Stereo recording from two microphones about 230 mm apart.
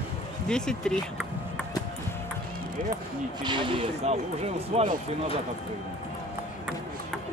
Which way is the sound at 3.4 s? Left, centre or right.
Centre.